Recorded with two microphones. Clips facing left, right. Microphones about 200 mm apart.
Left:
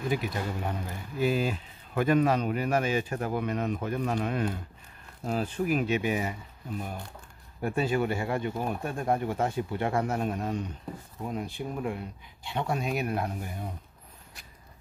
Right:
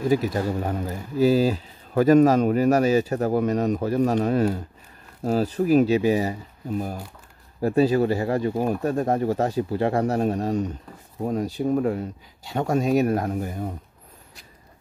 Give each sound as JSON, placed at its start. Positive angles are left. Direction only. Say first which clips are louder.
{"t": 0.1, "sound": "speech", "louder": "right 9 dB", "side_deg": -40}